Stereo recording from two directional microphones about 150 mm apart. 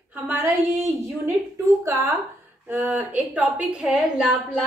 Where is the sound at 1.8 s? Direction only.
20° right (ahead or behind); by 4.3 s centre (ahead or behind).